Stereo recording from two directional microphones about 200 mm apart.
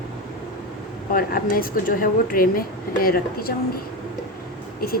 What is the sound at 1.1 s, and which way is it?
Speech, 45° left (ahead or behind).